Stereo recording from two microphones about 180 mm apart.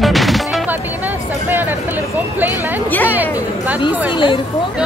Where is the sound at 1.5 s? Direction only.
10° right (ahead or behind).